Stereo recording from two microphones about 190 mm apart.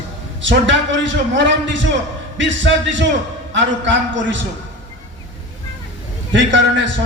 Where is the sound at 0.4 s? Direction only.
75° right (ahead or behind).